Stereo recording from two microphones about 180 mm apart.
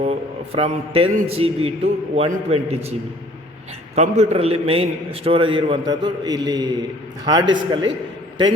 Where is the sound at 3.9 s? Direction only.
35° right (ahead or behind).